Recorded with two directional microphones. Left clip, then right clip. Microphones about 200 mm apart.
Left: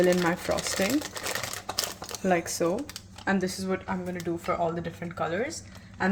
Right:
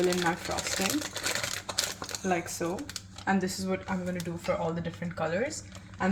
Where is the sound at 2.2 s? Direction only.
40° left (ahead or behind).